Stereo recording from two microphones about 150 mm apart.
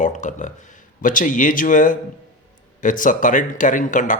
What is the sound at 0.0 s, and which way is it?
A man's voice, 55° left (ahead or behind).